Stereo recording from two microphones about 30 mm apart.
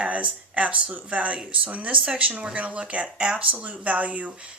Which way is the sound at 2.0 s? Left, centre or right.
Right.